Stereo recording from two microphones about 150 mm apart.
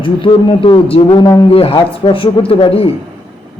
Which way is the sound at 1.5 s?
40° left (ahead or behind).